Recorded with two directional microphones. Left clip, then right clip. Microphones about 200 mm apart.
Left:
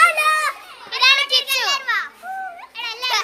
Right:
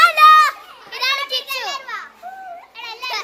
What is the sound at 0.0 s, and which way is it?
Children playing, centre (ahead or behind).